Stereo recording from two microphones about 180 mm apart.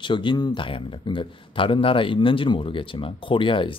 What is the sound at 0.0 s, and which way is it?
Speech, 25° left (ahead or behind).